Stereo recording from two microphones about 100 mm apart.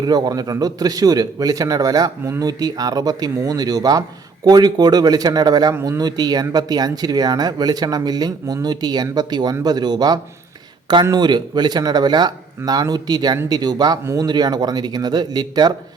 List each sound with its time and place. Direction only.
0.0 s speech: 40° right (ahead or behind)
14.0 s speech: 30° right (ahead or behind)
14.3 s speech: 45° right (ahead or behind)